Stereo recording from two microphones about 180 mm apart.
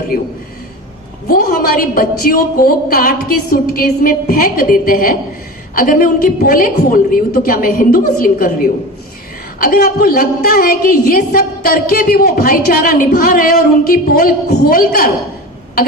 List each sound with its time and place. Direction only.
1.3 s a woman's voice: 55° left (ahead or behind)